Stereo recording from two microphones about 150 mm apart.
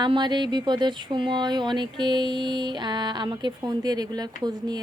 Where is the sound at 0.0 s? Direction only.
30° right (ahead or behind).